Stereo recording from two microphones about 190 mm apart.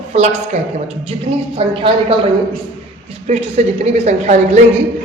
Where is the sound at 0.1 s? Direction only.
35° right (ahead or behind).